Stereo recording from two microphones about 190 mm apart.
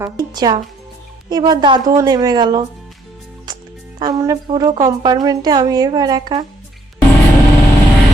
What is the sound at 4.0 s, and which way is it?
Speech, 20° right (ahead or behind).